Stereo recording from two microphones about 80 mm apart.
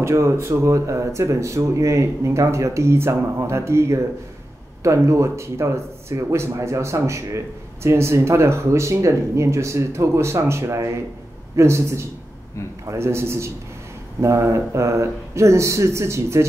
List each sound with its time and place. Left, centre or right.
0.0 s speech: right